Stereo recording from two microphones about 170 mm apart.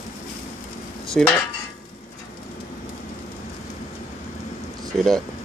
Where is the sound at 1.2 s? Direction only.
5° left (ahead or behind).